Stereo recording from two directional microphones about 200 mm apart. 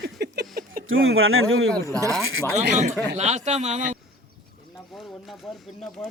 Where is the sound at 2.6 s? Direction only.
35° right (ahead or behind).